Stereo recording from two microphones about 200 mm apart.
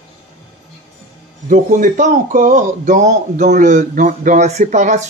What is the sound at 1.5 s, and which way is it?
Speech, 40° right (ahead or behind).